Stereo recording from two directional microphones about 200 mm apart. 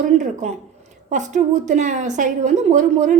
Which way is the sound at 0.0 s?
35° right (ahead or behind).